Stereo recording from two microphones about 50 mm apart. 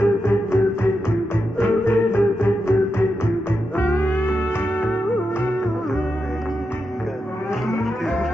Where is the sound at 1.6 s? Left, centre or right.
Left.